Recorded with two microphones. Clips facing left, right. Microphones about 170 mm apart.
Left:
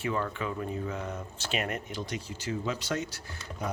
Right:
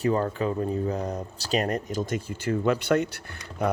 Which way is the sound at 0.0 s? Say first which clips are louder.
Right 7 dB; 40° right (ahead or behind).